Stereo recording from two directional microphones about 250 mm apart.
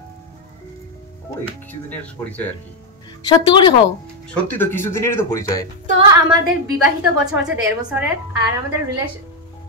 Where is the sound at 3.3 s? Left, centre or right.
Centre.